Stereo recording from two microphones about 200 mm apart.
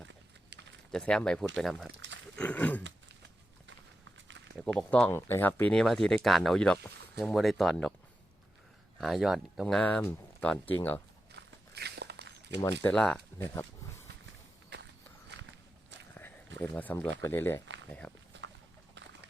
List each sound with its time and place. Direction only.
0.9 s speech: 5° left (ahead or behind)
4.5 s speech: 5° left (ahead or behind)
9.0 s speech: centre (ahead or behind)
11.3 s walk: 55° right (ahead or behind)
12.8 s speech: 5° left (ahead or behind)
14.7 s walk: 55° right (ahead or behind)
16.6 s speech: 5° left (ahead or behind)